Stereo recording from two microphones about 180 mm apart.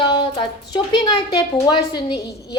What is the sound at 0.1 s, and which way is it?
Speech, 25° left (ahead or behind).